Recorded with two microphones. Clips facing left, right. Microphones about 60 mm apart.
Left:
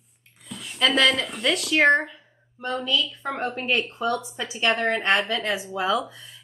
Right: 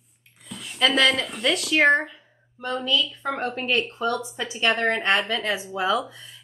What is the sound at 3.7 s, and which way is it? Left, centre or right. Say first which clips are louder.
Speech: right 1 dB; left.